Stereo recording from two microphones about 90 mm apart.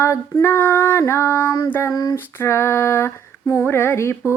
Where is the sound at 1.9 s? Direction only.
45° left (ahead or behind).